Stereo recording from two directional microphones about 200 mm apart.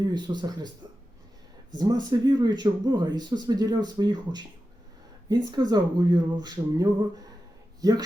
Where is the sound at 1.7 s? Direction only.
20° right (ahead or behind).